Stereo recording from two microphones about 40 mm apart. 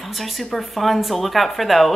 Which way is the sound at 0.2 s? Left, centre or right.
Centre.